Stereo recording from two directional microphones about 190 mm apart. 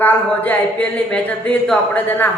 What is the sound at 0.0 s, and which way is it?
Speech, 10° left (ahead or behind).